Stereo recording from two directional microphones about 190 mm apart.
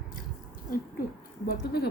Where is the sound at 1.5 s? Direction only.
55° left (ahead or behind).